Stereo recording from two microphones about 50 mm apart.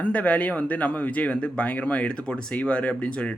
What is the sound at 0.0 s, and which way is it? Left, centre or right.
A man's voice, left.